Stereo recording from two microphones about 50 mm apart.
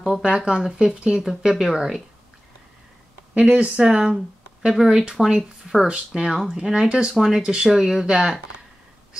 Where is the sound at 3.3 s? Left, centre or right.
Right.